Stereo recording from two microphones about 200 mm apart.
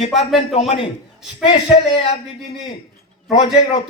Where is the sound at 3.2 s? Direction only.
30° left (ahead or behind).